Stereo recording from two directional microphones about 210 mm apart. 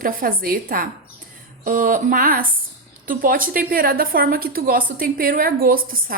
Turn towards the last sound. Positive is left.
turn(degrees=-45)  # may be behind; listen again after turning